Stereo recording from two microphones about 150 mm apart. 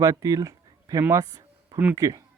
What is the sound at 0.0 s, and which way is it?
Speech, 25° right (ahead or behind).